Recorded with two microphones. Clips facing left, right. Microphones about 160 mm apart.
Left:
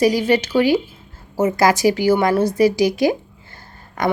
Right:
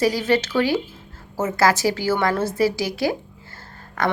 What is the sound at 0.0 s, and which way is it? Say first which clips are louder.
Speech: left 4 dB; 15° left (ahead or behind).